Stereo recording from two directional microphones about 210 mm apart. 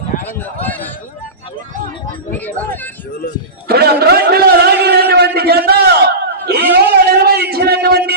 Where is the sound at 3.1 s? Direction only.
45° left (ahead or behind).